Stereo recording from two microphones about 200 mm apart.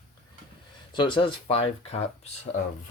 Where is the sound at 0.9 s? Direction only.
25° left (ahead or behind).